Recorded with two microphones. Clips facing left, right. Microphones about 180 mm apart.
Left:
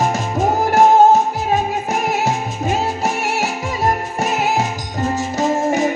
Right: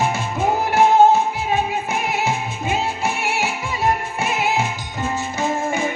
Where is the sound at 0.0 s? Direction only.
40° left (ahead or behind).